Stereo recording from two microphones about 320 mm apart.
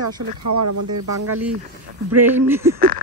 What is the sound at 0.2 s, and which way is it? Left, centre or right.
Speech, right.